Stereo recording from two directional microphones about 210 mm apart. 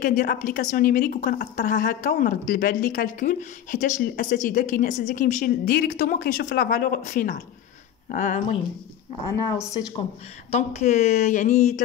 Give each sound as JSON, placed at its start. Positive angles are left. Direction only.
{"t": 0.0, "sound": "a woman's voice", "side_deg": 40}
{"t": 9.4, "sound": "speech", "side_deg": 20}
{"t": 10.5, "sound": "a woman's voice", "side_deg": 30}